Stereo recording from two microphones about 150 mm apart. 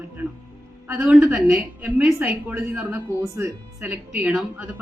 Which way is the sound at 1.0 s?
Centre (ahead or behind).